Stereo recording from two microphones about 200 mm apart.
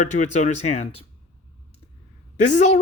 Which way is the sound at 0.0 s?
40° left (ahead or behind).